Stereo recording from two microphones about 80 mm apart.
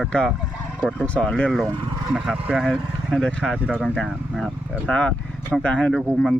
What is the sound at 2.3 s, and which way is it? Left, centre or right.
Speech, centre.